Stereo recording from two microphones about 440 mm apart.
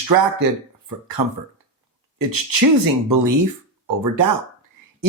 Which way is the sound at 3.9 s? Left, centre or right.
Right.